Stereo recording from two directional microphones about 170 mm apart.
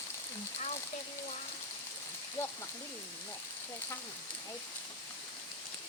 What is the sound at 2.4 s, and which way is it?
Speech, 15° left (ahead or behind).